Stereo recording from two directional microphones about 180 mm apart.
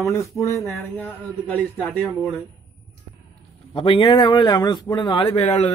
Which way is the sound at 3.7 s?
30° left (ahead or behind).